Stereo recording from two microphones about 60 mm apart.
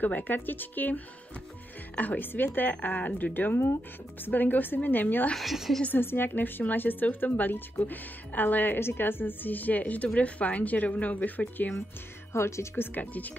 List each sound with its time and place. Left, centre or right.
0.0 s a woman's voice: left
5.4 s a woman's voice: centre
5.9 s a woman's voice: left
12.3 s speech: left
13.0 s a woman's voice: left